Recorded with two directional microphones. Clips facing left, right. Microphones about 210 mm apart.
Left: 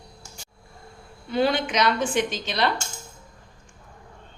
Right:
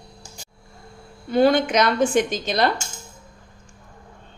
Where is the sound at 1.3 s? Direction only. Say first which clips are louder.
Right 6 dB; 45° right (ahead or behind).